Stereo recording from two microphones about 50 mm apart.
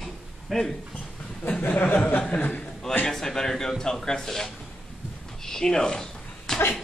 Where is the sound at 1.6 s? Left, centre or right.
Left.